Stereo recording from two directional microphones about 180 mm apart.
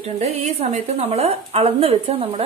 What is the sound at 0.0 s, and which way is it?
A woman's voice, 35° right (ahead or behind).